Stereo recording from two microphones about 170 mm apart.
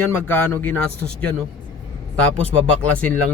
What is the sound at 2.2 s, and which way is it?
Speech, 5° left (ahead or behind).